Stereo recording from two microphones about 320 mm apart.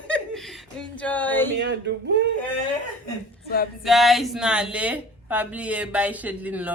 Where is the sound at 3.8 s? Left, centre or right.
Centre.